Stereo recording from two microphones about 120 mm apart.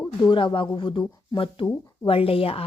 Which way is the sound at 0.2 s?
40° left (ahead or behind).